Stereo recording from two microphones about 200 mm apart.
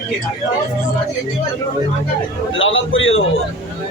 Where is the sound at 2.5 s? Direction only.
80° left.